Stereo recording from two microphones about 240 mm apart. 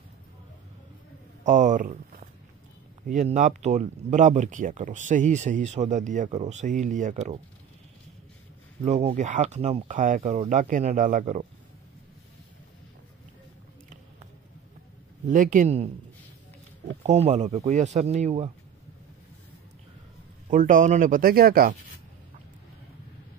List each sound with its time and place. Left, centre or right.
1.4 s speech: right
8.8 s speech: right
15.2 s speech: right
17.0 s speech: right
20.4 s speech: right